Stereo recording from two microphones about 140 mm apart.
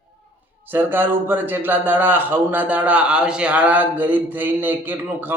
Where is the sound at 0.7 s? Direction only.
15° right (ahead or behind).